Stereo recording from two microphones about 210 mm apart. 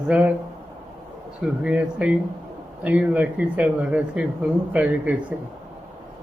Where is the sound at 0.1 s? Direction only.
5° right (ahead or behind).